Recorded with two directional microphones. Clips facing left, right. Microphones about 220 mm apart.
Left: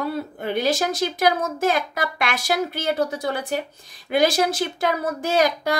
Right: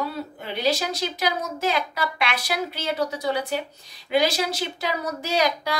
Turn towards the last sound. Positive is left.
turn(degrees=50)  # may be behind; listen again after turning